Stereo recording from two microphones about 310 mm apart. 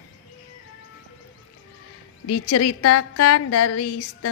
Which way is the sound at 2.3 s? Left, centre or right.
Left.